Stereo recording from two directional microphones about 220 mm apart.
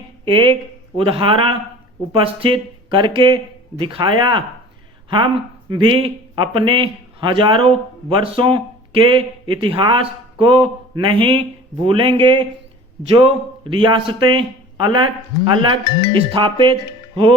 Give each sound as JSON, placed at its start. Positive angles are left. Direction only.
{"t": 0.9, "sound": "a woman's voice", "side_deg": -25}